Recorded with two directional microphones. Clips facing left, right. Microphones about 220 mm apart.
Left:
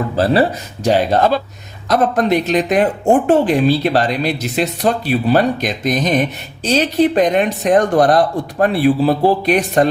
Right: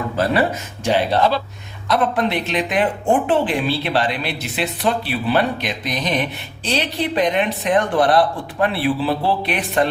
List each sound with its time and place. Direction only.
0.9 s speech: 45° left (ahead or behind)